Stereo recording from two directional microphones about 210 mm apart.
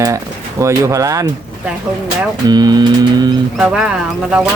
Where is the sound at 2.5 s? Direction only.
20° right (ahead or behind).